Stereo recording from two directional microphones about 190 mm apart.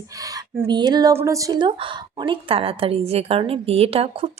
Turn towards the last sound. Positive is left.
turn(degrees=-30)  # may be behind; listen again after turning